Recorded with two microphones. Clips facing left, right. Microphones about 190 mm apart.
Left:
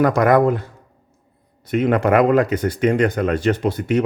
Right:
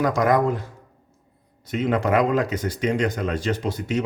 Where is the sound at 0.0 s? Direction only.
60° left (ahead or behind).